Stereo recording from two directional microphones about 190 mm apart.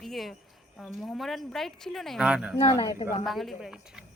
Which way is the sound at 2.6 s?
25° left (ahead or behind).